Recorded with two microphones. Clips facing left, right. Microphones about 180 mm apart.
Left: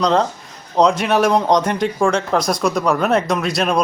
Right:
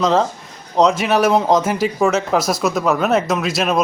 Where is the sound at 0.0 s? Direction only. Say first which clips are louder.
Even; 5° right (ahead or behind).